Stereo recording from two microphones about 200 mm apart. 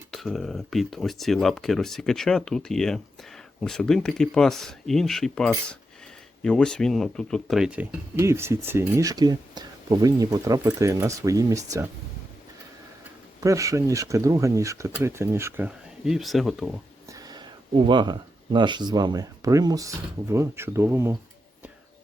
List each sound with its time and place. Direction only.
0.1 s speech: centre (ahead or behind); by 11.9 s 15° right (ahead or behind)
13.4 s speech: 15° right (ahead or behind)
17.1 s speech: 20° right (ahead or behind)